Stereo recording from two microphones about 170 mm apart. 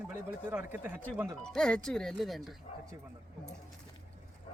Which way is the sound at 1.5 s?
5° left (ahead or behind).